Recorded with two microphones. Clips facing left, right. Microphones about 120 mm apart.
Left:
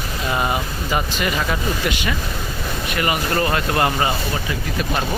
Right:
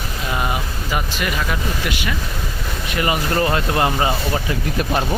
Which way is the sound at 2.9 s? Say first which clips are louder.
Right 2 dB; 20° right (ahead or behind).